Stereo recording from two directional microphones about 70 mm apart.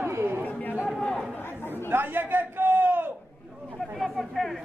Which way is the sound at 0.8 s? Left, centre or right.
Centre.